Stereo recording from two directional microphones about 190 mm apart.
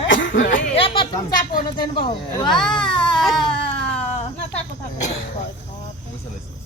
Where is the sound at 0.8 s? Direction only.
25° left (ahead or behind).